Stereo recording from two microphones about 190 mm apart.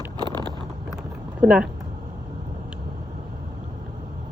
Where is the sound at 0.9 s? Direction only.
5° right (ahead or behind).